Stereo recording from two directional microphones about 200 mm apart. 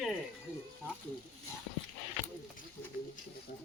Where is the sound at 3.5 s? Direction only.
50° left (ahead or behind).